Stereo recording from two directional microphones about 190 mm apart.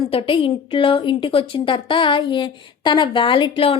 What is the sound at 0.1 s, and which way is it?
A woman's voice, 30° left (ahead or behind).